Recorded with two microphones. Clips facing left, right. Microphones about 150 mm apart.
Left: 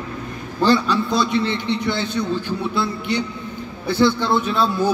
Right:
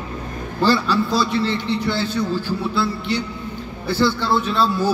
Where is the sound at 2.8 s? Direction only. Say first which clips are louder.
Left 1 dB; 15° left (ahead or behind).